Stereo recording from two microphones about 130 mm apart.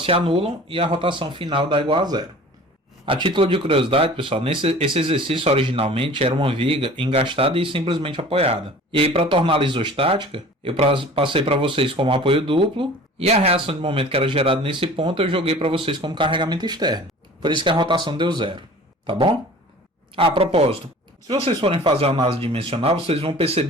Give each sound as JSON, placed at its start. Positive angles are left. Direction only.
{"t": 0.0, "sound": "speech", "side_deg": -45}